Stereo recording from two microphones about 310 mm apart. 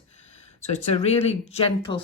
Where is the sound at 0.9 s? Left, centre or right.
Centre.